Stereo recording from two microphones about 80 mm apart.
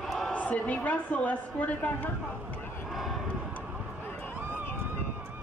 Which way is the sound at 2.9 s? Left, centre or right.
Centre.